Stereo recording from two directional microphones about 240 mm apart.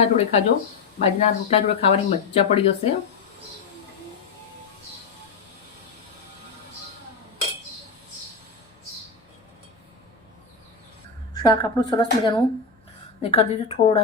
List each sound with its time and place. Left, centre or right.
0.0 s speech: left
11.4 s speech: centre